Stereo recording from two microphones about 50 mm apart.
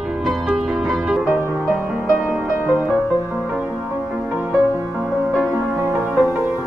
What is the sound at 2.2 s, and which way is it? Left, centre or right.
Music, right.